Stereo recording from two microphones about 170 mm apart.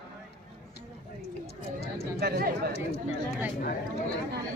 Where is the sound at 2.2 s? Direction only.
70° right (ahead or behind).